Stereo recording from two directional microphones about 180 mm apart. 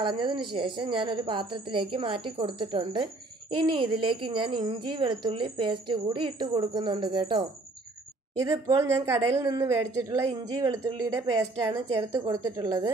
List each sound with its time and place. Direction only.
0.0 s speech: 25° right (ahead or behind)